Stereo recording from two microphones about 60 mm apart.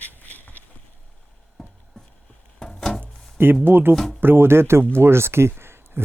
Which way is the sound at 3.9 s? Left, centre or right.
Centre.